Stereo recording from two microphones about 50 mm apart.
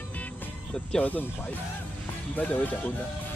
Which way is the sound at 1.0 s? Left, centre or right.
Left.